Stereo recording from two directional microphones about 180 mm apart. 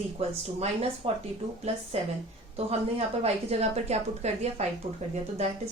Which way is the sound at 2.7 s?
35° right (ahead or behind).